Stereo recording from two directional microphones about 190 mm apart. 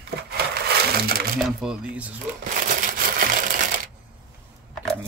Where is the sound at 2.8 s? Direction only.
45° right (ahead or behind).